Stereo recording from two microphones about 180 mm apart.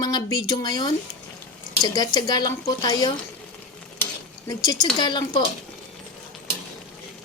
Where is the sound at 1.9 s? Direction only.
20° left (ahead or behind).